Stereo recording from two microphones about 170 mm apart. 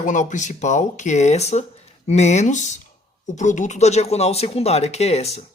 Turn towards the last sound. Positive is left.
turn(degrees=40)  # may be behind; listen again after turning